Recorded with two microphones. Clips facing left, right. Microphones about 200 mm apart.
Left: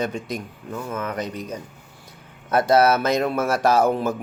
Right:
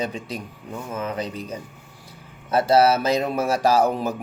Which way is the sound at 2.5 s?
30° right (ahead or behind).